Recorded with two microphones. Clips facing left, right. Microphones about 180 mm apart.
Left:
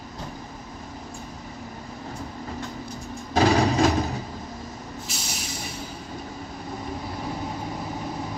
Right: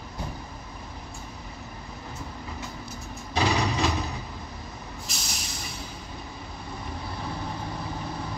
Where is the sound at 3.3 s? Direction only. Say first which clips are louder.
Left 6 dB; 45° left (ahead or behind).